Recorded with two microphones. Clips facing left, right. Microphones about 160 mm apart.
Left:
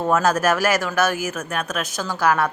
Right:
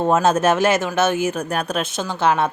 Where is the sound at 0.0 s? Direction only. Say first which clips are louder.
Right 2 dB; 25° right (ahead or behind).